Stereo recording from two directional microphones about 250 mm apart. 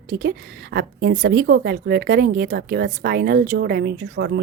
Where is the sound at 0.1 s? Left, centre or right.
Right.